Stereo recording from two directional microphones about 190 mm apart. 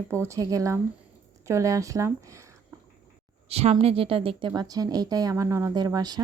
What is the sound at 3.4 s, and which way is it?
Speech, 30° right (ahead or behind).